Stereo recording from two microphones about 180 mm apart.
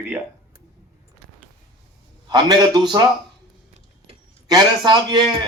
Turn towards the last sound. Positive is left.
turn(degrees=-25)  # may be behind; listen again after turning